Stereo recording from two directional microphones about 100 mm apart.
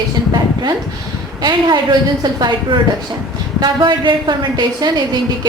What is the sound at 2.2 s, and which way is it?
Speech, 45° right (ahead or behind).